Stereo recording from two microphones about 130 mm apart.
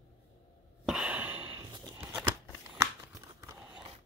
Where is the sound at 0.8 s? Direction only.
5° right (ahead or behind); by 3.6 s 25° right (ahead or behind).